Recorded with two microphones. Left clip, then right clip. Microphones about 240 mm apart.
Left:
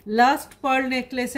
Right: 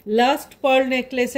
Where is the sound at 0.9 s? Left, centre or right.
Left.